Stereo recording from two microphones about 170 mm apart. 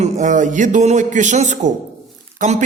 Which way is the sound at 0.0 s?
45° right (ahead or behind).